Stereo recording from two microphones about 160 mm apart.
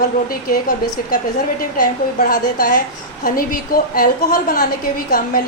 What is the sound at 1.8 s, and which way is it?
A woman's voice, 60° left (ahead or behind).